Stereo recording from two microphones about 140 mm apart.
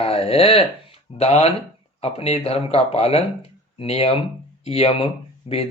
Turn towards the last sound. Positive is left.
turn(degrees=40)  # may be behind; listen again after turning